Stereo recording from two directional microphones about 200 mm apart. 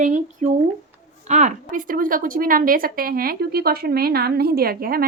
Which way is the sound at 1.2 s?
35° right (ahead or behind).